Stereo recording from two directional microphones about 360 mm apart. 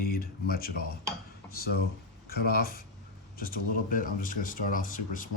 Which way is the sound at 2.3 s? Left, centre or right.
Left.